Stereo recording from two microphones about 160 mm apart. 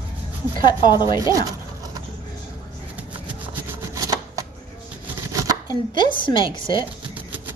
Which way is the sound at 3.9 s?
20° right (ahead or behind).